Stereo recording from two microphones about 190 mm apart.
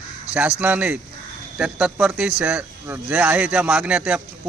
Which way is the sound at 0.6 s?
5° right (ahead or behind).